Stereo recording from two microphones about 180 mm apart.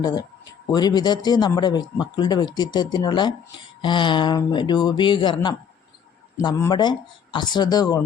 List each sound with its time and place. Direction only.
0.0 s a man's voice: 20° left (ahead or behind)